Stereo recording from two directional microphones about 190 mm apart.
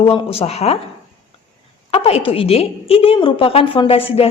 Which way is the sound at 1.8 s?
30° left (ahead or behind).